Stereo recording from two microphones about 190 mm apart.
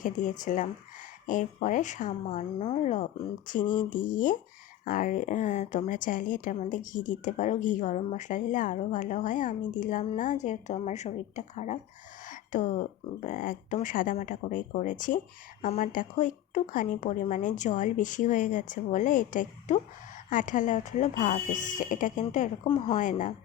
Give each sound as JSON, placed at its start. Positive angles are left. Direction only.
{"t": 0.0, "sound": "speech", "side_deg": 45}
{"t": 23.0, "sound": "speech", "side_deg": 40}